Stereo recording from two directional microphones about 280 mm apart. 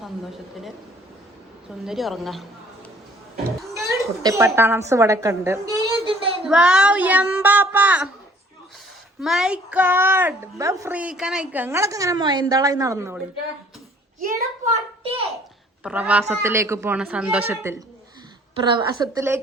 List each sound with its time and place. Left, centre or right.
1.8 s speech: centre
3.8 s a woman's voice: centre
6.4 s speech: centre
9.2 s a woman's voice: centre
14.2 s a child's voice: right
15.8 s a woman's voice: centre